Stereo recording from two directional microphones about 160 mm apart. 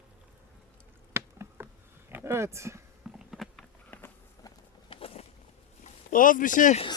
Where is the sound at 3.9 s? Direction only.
15° left (ahead or behind).